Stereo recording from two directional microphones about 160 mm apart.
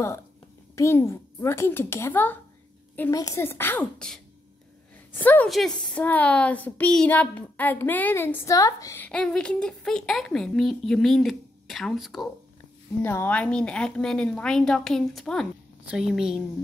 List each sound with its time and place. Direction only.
0.7 s a child's voice: 15° left (ahead or behind)
9.0 s a woman's voice: 5° left (ahead or behind)
13.0 s a woman's voice: 15° left (ahead or behind); by 16.4 s 5° right (ahead or behind)